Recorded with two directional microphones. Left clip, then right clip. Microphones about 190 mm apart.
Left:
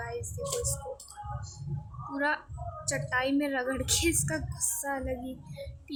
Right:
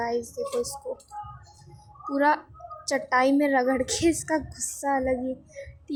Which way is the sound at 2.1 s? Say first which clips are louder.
Right 8 dB; 20° right (ahead or behind).